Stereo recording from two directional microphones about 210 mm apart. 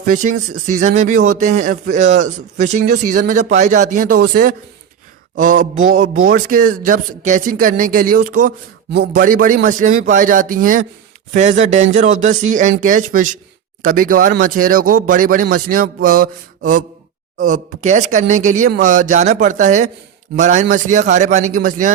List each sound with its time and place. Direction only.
0.0 s a man's voice: 40° right (ahead or behind)